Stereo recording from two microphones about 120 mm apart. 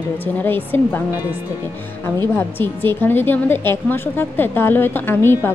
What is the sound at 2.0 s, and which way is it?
A woman's voice, 20° left (ahead or behind).